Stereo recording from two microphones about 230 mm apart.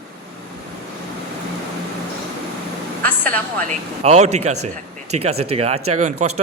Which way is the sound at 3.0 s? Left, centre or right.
Centre.